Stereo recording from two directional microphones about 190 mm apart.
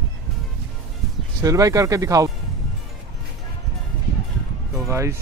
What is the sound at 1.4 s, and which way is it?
Speech, 20° right (ahead or behind).